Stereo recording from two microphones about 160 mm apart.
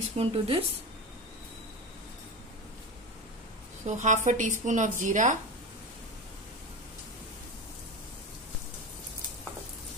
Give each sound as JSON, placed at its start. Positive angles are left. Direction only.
{"t": 0.2, "sound": "speech", "side_deg": -35}
{"t": 3.8, "sound": "a woman's voice", "side_deg": -50}